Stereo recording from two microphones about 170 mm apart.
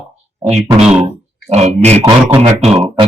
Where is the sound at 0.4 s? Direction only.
40° right (ahead or behind).